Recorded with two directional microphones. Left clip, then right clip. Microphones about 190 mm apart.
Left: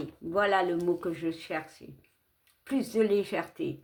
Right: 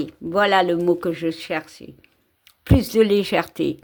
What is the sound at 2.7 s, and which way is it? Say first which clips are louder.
Speech: right 10 dB; 50° right (ahead or behind).